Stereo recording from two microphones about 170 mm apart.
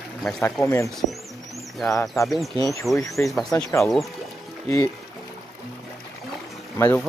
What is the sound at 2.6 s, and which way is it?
Speech, 20° left (ahead or behind).